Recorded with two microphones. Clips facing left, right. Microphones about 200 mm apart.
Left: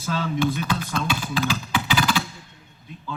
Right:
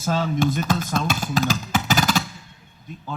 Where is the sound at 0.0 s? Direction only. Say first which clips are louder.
Right 2 dB; 45° right (ahead or behind).